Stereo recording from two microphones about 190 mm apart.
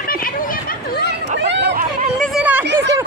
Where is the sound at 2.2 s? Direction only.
5° right (ahead or behind).